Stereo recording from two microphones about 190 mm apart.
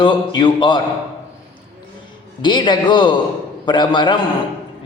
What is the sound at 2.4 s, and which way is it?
A man's voice, 25° left (ahead or behind).